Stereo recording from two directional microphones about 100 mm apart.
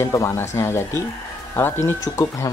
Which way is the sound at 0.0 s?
30° left (ahead or behind).